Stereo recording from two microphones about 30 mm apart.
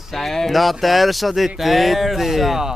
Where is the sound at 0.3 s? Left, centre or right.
Centre.